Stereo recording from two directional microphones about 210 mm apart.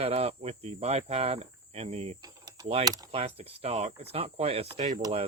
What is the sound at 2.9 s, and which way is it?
Speech, 15° right (ahead or behind).